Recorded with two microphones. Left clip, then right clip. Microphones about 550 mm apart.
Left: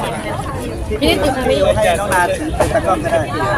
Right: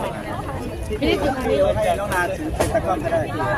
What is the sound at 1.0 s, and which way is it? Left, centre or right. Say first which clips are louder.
Speech: left 6 dB; centre.